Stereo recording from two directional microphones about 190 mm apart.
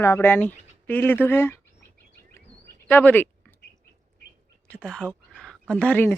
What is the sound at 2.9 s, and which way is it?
Speech, 10° left (ahead or behind).